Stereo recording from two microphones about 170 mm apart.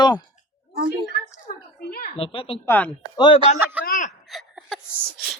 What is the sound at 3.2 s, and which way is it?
Speech, 25° left (ahead or behind).